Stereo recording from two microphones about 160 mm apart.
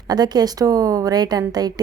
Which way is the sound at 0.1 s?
25° right (ahead or behind).